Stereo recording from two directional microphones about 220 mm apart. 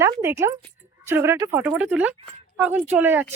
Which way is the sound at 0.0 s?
10° right (ahead or behind).